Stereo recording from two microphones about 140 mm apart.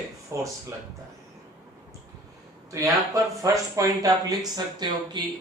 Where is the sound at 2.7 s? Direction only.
25° right (ahead or behind).